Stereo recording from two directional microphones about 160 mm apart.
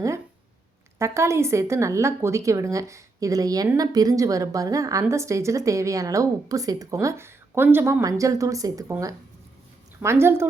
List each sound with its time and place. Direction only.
0.9 s a woman's voice: 20° right (ahead or behind)